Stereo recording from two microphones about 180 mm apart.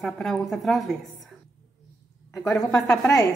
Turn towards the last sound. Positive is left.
turn(degrees=20)  # may be behind; listen again after turning